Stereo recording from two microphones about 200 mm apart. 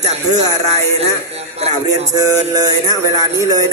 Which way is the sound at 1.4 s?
30° right (ahead or behind).